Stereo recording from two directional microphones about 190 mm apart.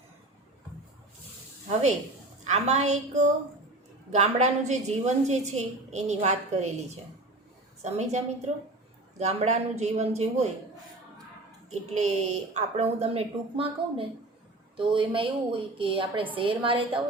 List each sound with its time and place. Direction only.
2.5 s a woman's voice: 35° right (ahead or behind)
7.8 s a woman's voice: 35° right (ahead or behind)
11.7 s a woman's voice: 35° right (ahead or behind)